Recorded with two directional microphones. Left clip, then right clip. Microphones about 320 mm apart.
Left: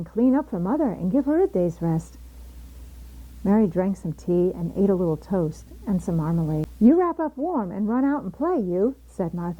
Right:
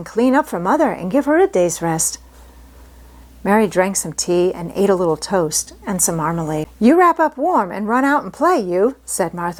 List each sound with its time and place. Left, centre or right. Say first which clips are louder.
0.0 s a woman's voice: right 7 dB; centre
3.4 s a woman's voice: right 8 dB; centre